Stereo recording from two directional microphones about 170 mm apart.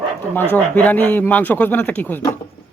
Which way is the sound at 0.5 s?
10° left (ahead or behind).